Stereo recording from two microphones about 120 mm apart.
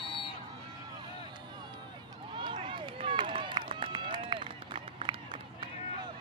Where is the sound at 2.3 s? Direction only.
45° right (ahead or behind).